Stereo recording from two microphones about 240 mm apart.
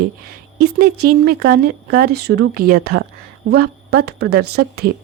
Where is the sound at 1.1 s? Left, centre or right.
Right.